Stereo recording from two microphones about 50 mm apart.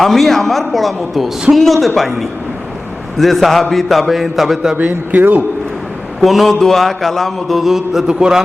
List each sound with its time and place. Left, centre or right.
0.0 s mantra: centre
4.8 s speech: right
6.1 s mantra: centre
8.0 s a man's voice: centre